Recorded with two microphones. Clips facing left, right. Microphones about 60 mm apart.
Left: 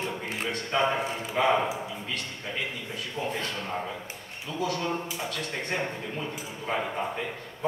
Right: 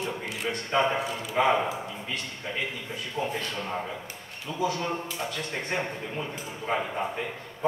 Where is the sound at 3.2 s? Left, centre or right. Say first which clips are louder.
Right 2 dB; right.